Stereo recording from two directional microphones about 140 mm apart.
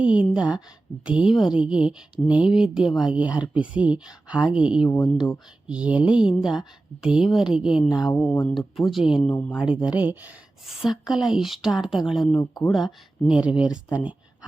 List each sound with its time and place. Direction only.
0.0 s speech: 10° right (ahead or behind)
4.9 s speech: 15° left (ahead or behind)
5.6 s speech: 10° right (ahead or behind)
8.1 s speech: 10° left (ahead or behind)
8.5 s speech: centre (ahead or behind)